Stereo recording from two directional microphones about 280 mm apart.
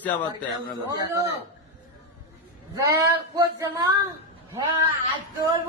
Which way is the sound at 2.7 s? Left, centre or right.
Centre.